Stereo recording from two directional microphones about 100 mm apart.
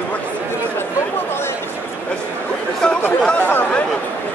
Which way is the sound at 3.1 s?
15° left (ahead or behind).